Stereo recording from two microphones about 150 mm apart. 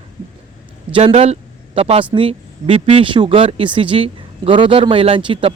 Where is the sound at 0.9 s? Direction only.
45° right (ahead or behind).